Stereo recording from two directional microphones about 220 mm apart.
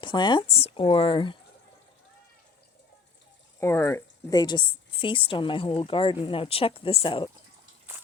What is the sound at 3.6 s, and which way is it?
A woman's voice, 10° left (ahead or behind).